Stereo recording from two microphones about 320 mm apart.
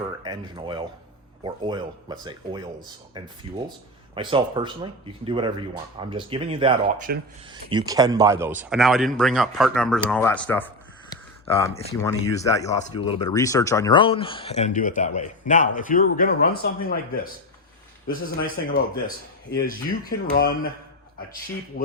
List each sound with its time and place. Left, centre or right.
0.2 s a man's voice: centre
11.1 s a sound: centre
11.7 s speech: centre; by 17.0 s left
18.1 s speech: left